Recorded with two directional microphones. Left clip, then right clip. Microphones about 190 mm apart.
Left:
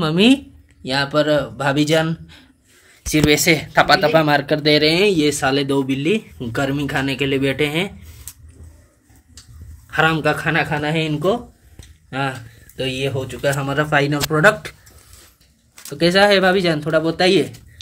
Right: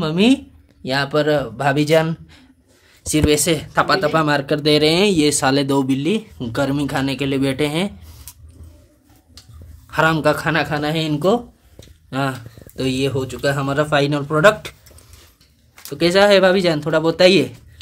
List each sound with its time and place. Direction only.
0.0 s speech: centre (ahead or behind)
0.8 s speech: 15° right (ahead or behind)
5.4 s speech: 35° right (ahead or behind); by 8.2 s 20° right (ahead or behind)
9.9 s speech: 30° right (ahead or behind); by 14.8 s 15° right (ahead or behind)
15.9 s speech: 15° right (ahead or behind)